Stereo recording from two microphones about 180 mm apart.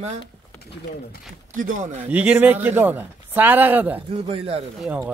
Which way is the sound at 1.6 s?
45° right (ahead or behind).